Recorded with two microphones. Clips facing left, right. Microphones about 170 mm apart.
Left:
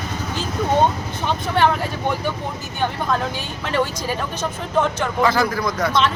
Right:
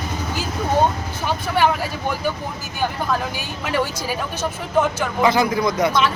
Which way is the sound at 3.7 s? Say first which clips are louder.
Left 1 dB; 10° right (ahead or behind).